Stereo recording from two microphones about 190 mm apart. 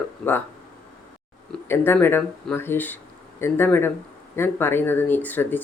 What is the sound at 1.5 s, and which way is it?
Speech, 10° left (ahead or behind).